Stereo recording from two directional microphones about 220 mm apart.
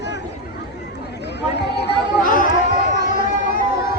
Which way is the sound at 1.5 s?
50° left (ahead or behind).